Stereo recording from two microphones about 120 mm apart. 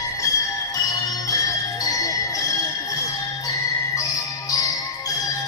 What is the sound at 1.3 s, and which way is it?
Bell, 30° left (ahead or behind).